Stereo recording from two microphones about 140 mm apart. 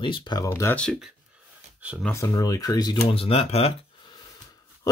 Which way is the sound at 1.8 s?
10° right (ahead or behind).